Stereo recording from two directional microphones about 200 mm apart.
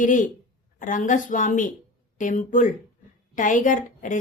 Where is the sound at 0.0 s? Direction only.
40° left (ahead or behind).